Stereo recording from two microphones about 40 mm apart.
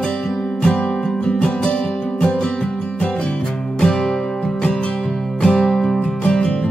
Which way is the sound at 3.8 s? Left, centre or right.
Centre.